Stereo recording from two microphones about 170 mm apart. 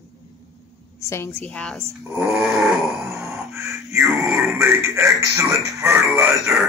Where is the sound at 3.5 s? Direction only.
15° right (ahead or behind).